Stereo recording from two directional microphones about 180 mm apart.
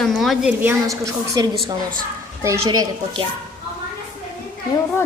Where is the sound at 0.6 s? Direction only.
15° right (ahead or behind).